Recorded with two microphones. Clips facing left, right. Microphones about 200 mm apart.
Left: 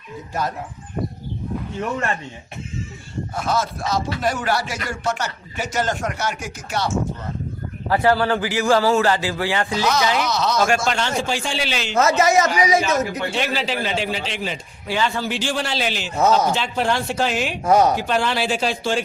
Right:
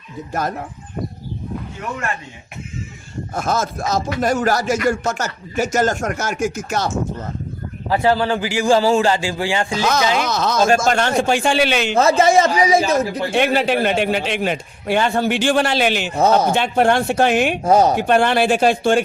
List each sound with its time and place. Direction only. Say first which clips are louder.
3.3 s speech: right 2 dB; 45° right (ahead or behind)
7.9 s a man's voice: right 1 dB; 20° right (ahead or behind)
10.2 s a man's voice: right 3 dB; 50° right (ahead or behind)
11.9 s a man's voice: right 2 dB; 30° right (ahead or behind)
13.3 s a man's voice: right 11 dB; 55° right (ahead or behind)
17.6 s speech: even; 30° right (ahead or behind)
17.9 s a man's voice: right 6 dB; 55° right (ahead or behind)